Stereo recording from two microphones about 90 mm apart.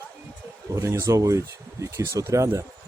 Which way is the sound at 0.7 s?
35° right (ahead or behind).